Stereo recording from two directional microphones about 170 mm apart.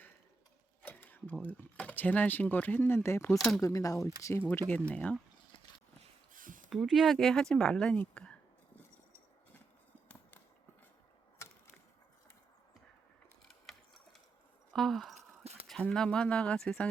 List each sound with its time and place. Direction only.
0.8 s speech: 10° left (ahead or behind)
3.3 s speech: centre (ahead or behind)
3.6 s speech: 20° left (ahead or behind)
6.3 s a sound: 50° right (ahead or behind)
6.7 s speech: centre (ahead or behind)
11.4 s wood: 15° left (ahead or behind)
13.5 s sewing machine: centre (ahead or behind)
14.7 s speech: centre (ahead or behind)
15.1 s a sound: 40° right (ahead or behind)
15.6 s speech: 5° left (ahead or behind)